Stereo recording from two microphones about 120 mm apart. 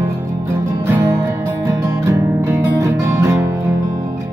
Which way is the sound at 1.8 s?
25° right (ahead or behind).